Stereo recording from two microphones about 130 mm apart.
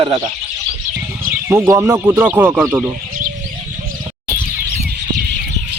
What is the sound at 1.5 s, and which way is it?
Speech, 20° right (ahead or behind).